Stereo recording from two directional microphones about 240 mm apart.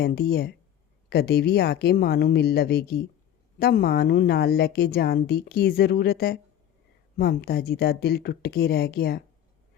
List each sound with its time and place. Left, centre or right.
0.0 s a woman's voice: left